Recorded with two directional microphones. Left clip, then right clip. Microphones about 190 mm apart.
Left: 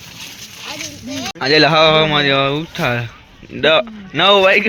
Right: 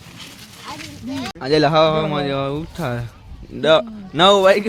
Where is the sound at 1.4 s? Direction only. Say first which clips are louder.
Left 4 dB; 5° left (ahead or behind).